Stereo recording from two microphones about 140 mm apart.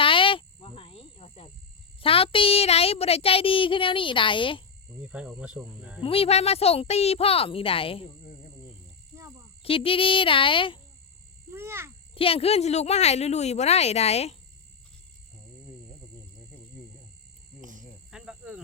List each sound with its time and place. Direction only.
0.0 s cricket: 40° left (ahead or behind)
2.0 s speech: 40° left (ahead or behind)
5.0 s speech: 5° right (ahead or behind)
6.0 s a woman's voice: 40° left (ahead or behind)
9.1 s a sound: 20° right (ahead or behind)
9.6 s speech: 40° left (ahead or behind)
11.5 s a sound: 20° right (ahead or behind)
12.1 s a woman's voice: 40° left (ahead or behind)
18.1 s cricket: 5° right (ahead or behind)